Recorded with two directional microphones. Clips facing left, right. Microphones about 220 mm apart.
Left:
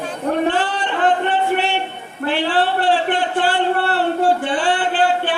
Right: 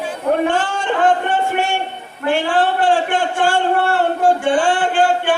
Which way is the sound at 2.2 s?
45° right (ahead or behind).